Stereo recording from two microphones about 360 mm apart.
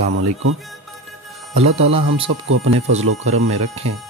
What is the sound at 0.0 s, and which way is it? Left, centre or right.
Speech, right.